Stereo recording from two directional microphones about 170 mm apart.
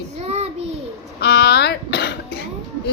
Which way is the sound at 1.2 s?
75° left (ahead or behind).